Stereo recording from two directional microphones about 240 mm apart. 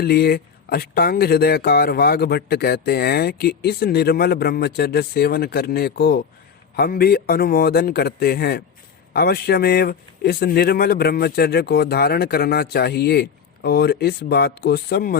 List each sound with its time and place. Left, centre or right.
0.0 s speech: left